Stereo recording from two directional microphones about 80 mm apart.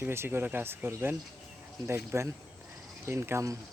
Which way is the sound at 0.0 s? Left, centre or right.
Right.